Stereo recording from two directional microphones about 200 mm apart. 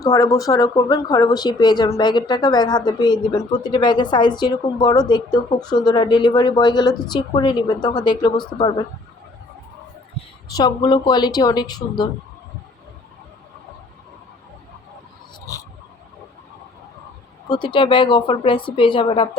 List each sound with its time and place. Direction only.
0.0 s speech: 15° left (ahead or behind)
10.5 s speech: 20° left (ahead or behind)
17.5 s speech: 25° left (ahead or behind)